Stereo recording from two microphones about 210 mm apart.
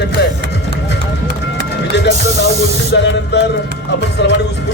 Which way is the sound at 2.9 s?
60° left (ahead or behind).